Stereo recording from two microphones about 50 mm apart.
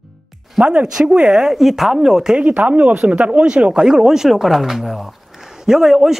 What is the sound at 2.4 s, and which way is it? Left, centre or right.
Speech, right.